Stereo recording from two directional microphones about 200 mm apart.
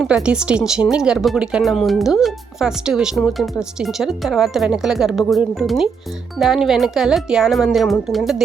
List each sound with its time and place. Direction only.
0.0 s speech: 5° right (ahead or behind)